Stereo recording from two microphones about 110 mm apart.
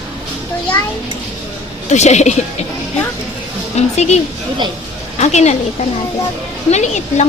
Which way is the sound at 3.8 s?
90° left.